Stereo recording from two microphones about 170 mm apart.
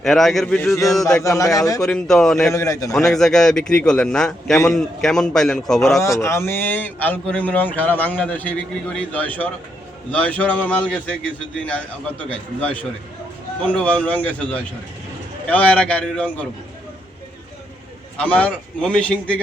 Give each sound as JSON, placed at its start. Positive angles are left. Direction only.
{"t": 0.0, "sound": "a man's voice", "side_deg": 0}
{"t": 1.2, "sound": "a man's voice", "side_deg": 20}
{"t": 1.8, "sound": "a man's voice", "side_deg": 0}
{"t": 2.5, "sound": "a man's voice", "side_deg": 20}
{"t": 2.9, "sound": "a man's voice", "side_deg": 0}
{"t": 6.0, "sound": "speech", "side_deg": 15}
{"t": 12.5, "sound": "speech", "side_deg": 10}
{"t": 18.2, "sound": "speech", "side_deg": 5}